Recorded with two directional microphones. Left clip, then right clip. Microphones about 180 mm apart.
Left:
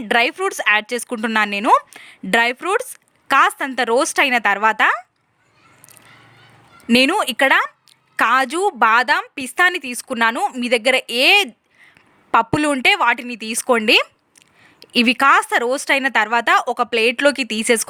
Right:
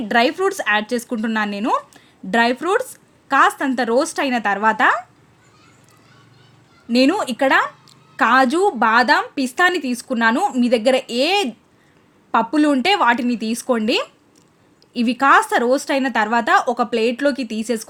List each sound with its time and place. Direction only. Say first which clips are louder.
0.1 s a woman's voice: even; 25° left (ahead or behind)
6.8 s a woman's voice: left 2 dB; 25° left (ahead or behind)